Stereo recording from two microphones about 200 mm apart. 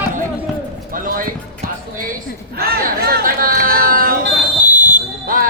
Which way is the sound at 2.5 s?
50° right (ahead or behind).